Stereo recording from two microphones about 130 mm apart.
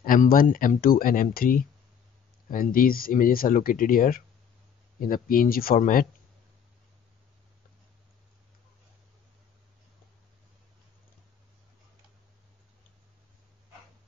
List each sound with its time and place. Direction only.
0.0 s speech: 90° left